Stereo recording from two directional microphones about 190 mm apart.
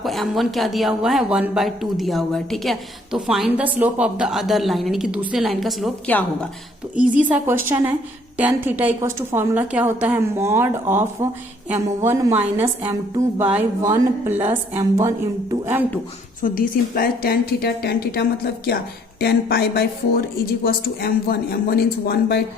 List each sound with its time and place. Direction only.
0.0 s a woman's voice: centre (ahead or behind)
6.9 s a woman's voice: 5° right (ahead or behind)
12.6 s a woman's voice: 20° right (ahead or behind)
16.4 s a woman's voice: 50° left (ahead or behind)